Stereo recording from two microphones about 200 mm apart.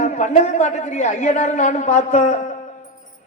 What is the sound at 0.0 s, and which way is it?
A man's voice, 35° left (ahead or behind).